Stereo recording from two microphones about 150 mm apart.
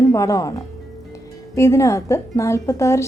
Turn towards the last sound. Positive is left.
turn(degrees=20)  # may be behind; listen again after turning